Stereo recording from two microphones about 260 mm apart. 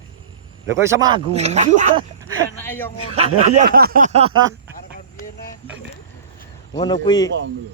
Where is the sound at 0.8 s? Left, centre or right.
Centre.